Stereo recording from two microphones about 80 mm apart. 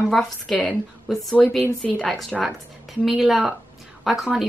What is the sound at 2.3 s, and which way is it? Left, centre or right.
Speech, centre.